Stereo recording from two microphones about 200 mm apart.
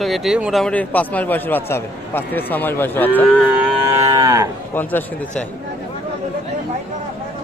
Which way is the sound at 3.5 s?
15° right (ahead or behind).